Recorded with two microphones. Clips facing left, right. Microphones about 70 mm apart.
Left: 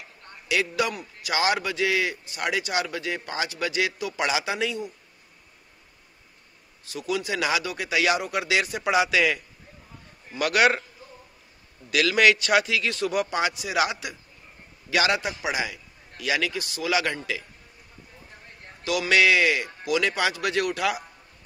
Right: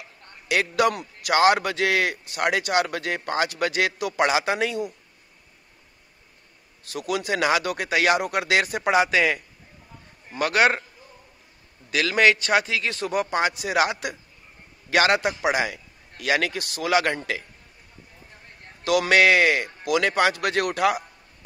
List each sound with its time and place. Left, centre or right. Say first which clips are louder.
0.5 s a man's voice: right 4 dB; right
6.8 s a man's voice: right 1 dB; right
11.9 s a man's voice: even; right
18.9 s a man's voice: right 3 dB; right